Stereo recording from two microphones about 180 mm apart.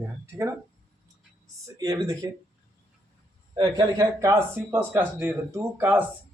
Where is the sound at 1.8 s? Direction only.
20° right (ahead or behind).